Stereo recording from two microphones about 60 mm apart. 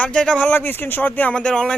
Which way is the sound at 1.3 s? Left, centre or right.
Centre.